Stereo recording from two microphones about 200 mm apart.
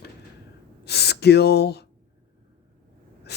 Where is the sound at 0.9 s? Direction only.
55° left (ahead or behind).